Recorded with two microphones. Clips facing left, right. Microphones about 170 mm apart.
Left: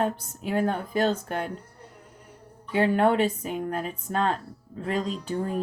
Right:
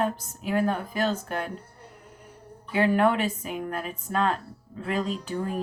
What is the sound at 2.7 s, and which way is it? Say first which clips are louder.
Speech: left 1 dB; 25° left (ahead or behind).